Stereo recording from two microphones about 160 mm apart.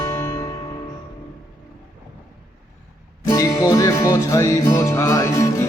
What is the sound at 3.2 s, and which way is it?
Music, 20° left (ahead or behind).